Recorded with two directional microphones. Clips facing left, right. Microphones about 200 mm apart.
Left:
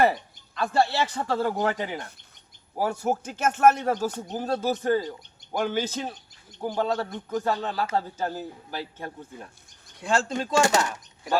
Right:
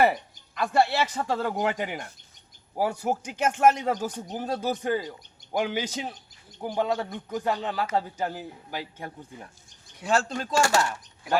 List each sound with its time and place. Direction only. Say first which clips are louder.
0.5 s speech: even; 15° right (ahead or behind)
10.0 s speech: even; centre (ahead or behind)
10.3 s speech: left 2 dB; 20° left (ahead or behind)